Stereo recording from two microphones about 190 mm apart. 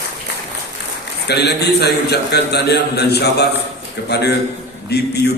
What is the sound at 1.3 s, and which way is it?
A man's voice, 60° left (ahead or behind).